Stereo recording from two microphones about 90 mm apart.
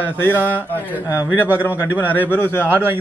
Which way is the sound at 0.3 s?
20° right (ahead or behind).